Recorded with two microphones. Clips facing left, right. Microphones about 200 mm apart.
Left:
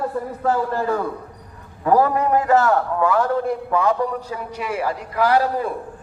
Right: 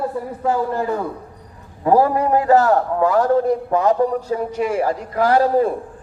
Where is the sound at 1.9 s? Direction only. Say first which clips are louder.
Right 2 dB; 30° right (ahead or behind).